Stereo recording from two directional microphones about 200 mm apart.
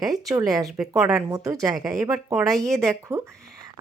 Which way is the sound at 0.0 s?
15° right (ahead or behind).